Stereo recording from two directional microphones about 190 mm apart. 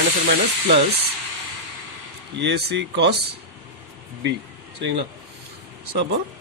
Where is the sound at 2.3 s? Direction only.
65° right (ahead or behind).